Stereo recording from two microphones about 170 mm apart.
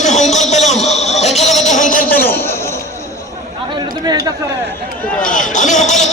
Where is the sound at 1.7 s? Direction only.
50° left (ahead or behind).